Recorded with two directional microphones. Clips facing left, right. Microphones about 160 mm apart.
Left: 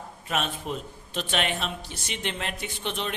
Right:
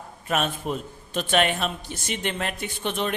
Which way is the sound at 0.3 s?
50° right (ahead or behind).